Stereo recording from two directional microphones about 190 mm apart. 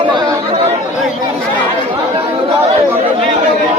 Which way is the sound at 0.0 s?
25° right (ahead or behind).